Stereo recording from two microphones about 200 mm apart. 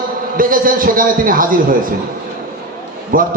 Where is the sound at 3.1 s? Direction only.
45° right (ahead or behind).